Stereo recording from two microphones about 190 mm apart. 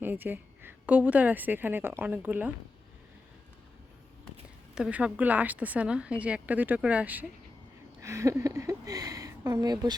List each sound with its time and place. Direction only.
0.0 s a woman's voice: 10° right (ahead or behind)
4.7 s a woman's voice: 5° right (ahead or behind); by 9.9 s 20° right (ahead or behind)